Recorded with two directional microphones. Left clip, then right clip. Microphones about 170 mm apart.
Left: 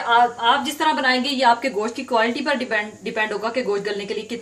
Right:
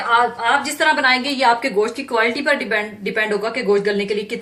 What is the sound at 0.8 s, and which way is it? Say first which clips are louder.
A woman's voice: right 4 dB; 55° left (ahead or behind).